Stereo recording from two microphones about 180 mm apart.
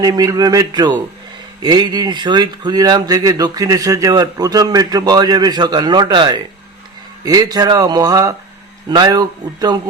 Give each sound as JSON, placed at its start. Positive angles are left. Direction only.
{"t": 0.0, "sound": "speech", "side_deg": -20}